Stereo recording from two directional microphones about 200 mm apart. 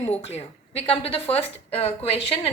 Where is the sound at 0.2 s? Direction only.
30° left (ahead or behind).